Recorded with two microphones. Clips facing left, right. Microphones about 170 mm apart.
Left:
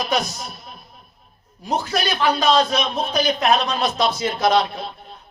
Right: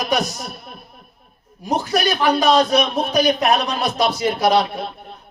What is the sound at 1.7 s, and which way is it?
A man's voice, 15° right (ahead or behind).